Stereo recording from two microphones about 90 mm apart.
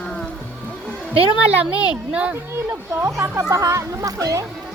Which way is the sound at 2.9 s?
30° right (ahead or behind).